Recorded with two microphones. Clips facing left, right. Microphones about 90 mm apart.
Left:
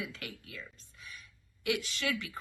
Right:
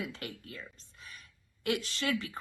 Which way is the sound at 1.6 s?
40° right (ahead or behind).